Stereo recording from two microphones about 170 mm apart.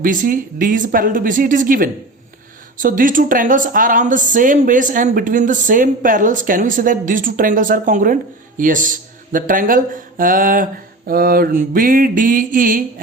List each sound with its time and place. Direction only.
0.0 s speech: 50° right (ahead or behind)